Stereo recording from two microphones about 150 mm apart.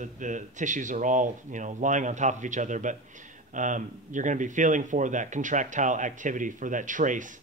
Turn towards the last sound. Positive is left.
turn(degrees=-60)  # may be behind; listen again after turning